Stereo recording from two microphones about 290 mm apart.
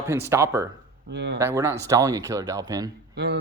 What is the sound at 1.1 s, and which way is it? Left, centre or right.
Speech, right.